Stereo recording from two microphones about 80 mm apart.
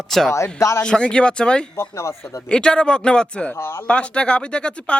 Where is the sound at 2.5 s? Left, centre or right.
Centre.